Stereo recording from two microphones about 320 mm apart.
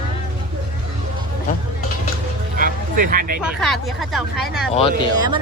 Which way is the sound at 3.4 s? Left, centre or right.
Centre.